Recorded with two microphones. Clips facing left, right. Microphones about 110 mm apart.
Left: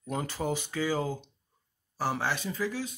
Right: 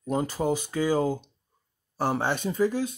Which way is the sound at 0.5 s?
45° right (ahead or behind).